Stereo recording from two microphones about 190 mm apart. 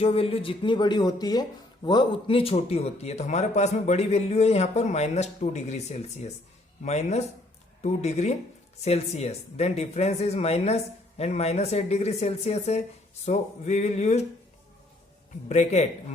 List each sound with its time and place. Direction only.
0.0 s speech: 30° left (ahead or behind)
15.4 s speech: 35° left (ahead or behind)